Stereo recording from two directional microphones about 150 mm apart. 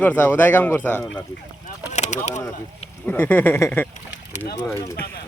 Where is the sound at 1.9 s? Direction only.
50° left (ahead or behind).